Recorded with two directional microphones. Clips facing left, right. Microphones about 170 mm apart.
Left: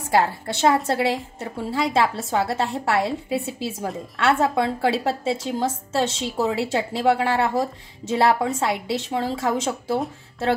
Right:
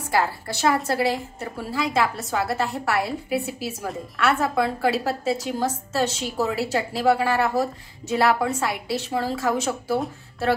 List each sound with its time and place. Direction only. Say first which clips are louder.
0.1 s a woman's voice: left 3 dB; 25° left (ahead or behind)